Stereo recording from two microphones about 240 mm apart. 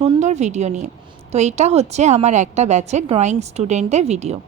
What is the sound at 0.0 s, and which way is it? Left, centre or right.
A woman's voice, right.